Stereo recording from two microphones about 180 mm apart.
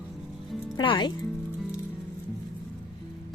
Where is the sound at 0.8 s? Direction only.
25° left (ahead or behind).